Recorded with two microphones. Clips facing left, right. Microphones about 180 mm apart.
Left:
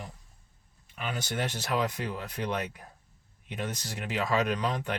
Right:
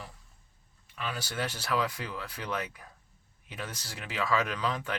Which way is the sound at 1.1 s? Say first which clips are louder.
Left 4 dB; 20° left (ahead or behind).